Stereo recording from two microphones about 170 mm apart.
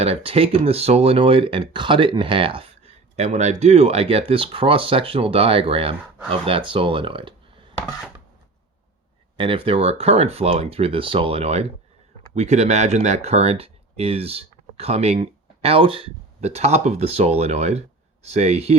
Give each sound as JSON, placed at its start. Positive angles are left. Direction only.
{"t": 0.0, "sound": "speech", "side_deg": -35}
{"t": 9.4, "sound": "speech", "side_deg": -30}